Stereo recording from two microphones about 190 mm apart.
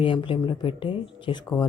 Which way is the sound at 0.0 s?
25° left (ahead or behind).